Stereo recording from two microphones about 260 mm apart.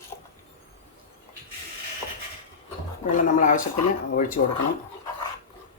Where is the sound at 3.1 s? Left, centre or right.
Left.